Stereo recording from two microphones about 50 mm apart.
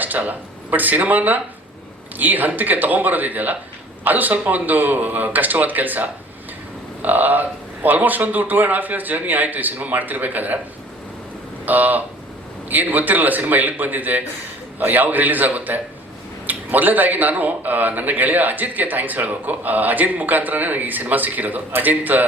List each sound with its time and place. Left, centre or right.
0.0 s a man's voice: right
11.6 s a man's voice: right